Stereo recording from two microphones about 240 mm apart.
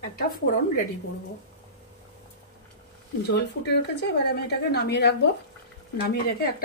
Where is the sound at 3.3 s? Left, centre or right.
Left.